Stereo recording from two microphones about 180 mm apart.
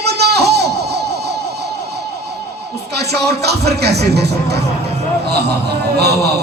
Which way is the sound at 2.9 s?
65° right (ahead or behind).